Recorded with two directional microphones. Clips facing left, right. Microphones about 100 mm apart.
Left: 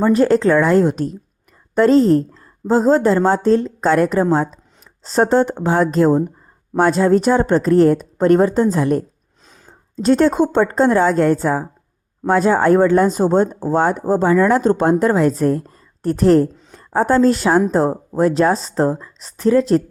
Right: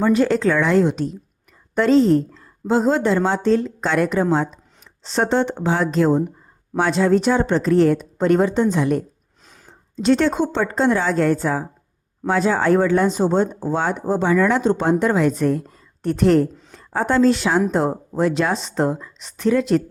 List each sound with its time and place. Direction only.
0.0 s a woman's voice: 40° left (ahead or behind)